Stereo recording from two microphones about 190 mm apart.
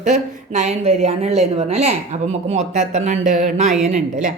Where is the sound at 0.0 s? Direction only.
40° right (ahead or behind).